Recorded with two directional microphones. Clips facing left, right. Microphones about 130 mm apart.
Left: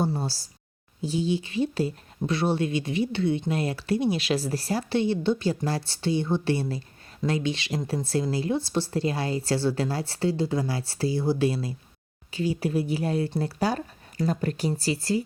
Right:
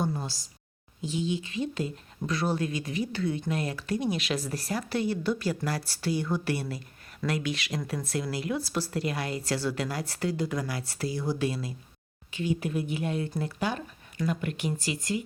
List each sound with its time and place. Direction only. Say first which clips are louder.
0.0 s speech: left 4 dB; 30° left (ahead or behind)